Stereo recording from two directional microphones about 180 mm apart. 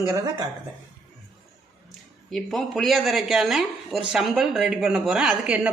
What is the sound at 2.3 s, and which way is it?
Speech, centre (ahead or behind).